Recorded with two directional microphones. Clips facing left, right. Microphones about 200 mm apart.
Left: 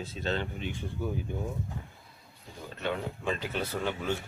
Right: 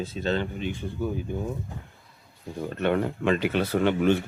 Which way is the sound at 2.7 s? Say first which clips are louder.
Right 9 dB; 60° right (ahead or behind).